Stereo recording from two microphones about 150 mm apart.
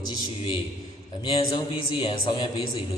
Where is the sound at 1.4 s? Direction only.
35° left (ahead or behind).